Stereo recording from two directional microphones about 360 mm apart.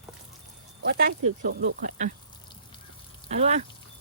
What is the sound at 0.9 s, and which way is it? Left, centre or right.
Speech, right.